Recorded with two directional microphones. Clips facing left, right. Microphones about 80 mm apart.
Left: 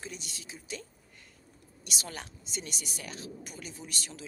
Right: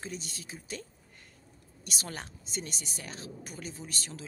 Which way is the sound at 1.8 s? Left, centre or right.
Right.